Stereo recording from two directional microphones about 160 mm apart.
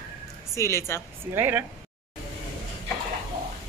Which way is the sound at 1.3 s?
15° right (ahead or behind).